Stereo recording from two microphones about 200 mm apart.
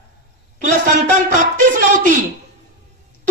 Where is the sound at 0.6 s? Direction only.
40° right (ahead or behind).